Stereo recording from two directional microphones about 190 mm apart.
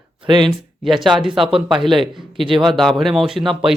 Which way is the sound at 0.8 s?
Centre (ahead or behind).